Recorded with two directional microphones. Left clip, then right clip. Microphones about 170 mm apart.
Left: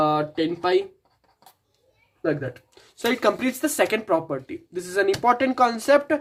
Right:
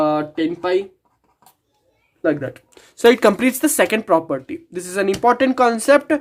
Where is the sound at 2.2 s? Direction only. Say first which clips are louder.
Right 6 dB; 35° right (ahead or behind).